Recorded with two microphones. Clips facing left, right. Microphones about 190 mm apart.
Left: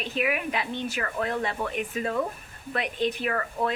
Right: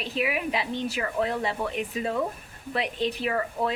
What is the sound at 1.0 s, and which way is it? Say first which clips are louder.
Speech: right 2 dB; 15° right (ahead or behind).